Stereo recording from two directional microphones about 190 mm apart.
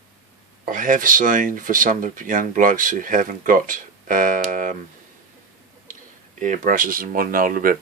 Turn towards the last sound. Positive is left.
turn(degrees=-50)  # may be behind; listen again after turning